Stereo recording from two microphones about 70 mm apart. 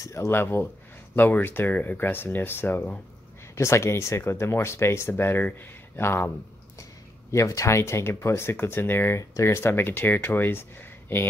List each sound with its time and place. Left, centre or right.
0.1 s speech: left
3.5 s speech: left
6.8 s speech: left